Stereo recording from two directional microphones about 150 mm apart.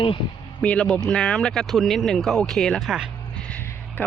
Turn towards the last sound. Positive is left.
turn(degrees=10)  # may be behind; listen again after turning